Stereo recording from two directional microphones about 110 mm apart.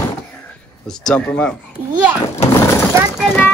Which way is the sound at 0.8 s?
5° left (ahead or behind).